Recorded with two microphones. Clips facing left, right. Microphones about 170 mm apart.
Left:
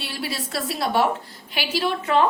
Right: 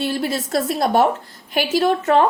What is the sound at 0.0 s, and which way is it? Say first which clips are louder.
A woman's voice: right 8 dB; 45° right (ahead or behind).